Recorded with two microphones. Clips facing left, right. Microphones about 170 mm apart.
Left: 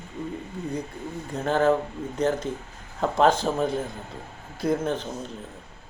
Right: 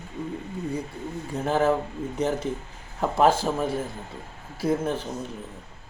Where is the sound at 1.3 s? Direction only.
10° right (ahead or behind).